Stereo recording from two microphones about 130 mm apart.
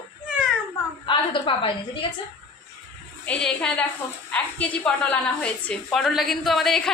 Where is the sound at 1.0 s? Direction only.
40° left (ahead or behind).